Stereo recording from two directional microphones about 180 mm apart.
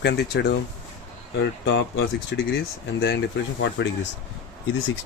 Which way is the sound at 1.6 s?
80° left.